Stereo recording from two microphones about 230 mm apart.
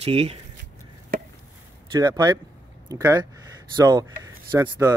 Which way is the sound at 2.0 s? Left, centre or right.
Centre.